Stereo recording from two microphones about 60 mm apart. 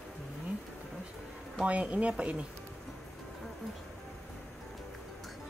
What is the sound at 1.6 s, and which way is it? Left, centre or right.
Speech, right.